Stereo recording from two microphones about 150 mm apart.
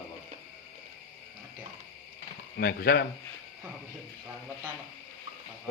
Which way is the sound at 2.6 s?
85° left.